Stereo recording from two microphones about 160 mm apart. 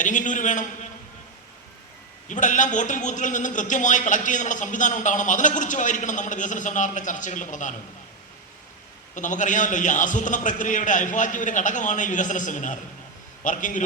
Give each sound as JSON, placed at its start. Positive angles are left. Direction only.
{"t": 0.0, "sound": "a man's voice", "side_deg": 50}
{"t": 2.3, "sound": "a man's voice", "side_deg": 50}
{"t": 9.1, "sound": "a man's voice", "side_deg": 50}